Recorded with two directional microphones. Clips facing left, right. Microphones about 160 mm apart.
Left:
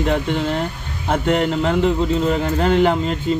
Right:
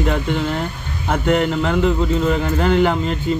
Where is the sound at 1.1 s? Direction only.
30° left (ahead or behind).